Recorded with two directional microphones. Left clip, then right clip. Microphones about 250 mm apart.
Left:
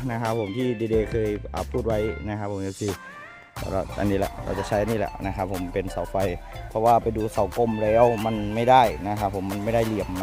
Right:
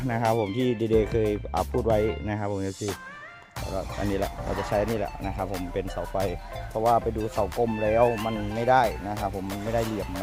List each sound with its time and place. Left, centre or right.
0.1 s speech: centre
3.7 s speech: left